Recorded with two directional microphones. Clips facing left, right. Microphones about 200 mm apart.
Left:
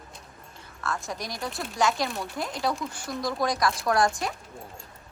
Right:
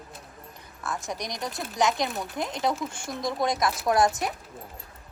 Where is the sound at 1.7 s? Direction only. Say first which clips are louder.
Right 1 dB; 20° right (ahead or behind).